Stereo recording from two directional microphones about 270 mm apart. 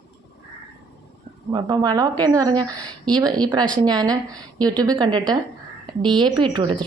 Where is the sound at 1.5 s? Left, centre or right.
Centre.